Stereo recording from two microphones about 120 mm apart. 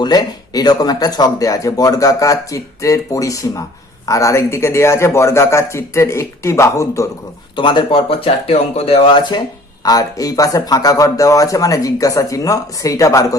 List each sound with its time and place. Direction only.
0.0 s speech: 35° left (ahead or behind)
7.5 s speech: 40° left (ahead or behind)
9.8 s speech: 30° left (ahead or behind)